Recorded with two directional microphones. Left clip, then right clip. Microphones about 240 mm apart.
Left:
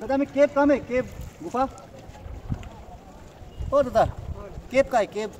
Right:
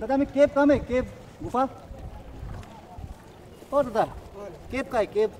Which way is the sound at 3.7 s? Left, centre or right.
Left.